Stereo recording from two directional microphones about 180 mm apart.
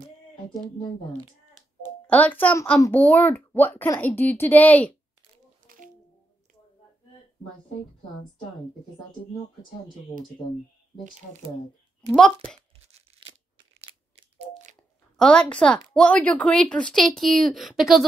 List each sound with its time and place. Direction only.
2.0 s speech: 10° left (ahead or behind)
5.7 s music: 50° right (ahead or behind)
12.1 s speech: 5° left (ahead or behind)
13.1 s tearing: 35° right (ahead or behind)
15.1 s speech: 5° left (ahead or behind)